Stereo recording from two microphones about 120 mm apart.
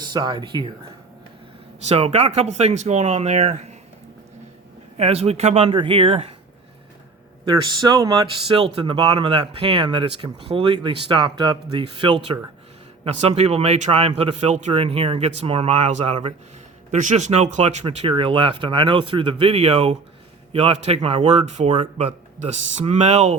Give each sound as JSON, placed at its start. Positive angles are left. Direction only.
{"t": 0.0, "sound": "speech", "side_deg": -40}
{"t": 1.9, "sound": "speech", "side_deg": -65}
{"t": 4.9, "sound": "speech", "side_deg": -55}
{"t": 5.7, "sound": "speech", "side_deg": -45}
{"t": 7.6, "sound": "speech", "side_deg": -35}
{"t": 8.4, "sound": "speech", "side_deg": -50}
{"t": 13.1, "sound": "speech", "side_deg": -60}
{"t": 14.7, "sound": "speech", "side_deg": -55}
{"t": 16.9, "sound": "speech", "side_deg": -85}